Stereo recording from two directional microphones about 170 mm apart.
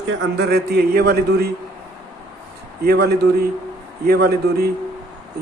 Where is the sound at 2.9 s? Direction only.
65° right (ahead or behind).